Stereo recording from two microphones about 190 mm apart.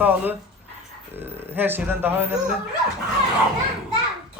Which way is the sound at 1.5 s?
10° right (ahead or behind).